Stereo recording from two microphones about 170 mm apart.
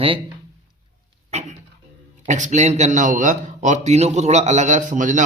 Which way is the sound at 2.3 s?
45° right (ahead or behind).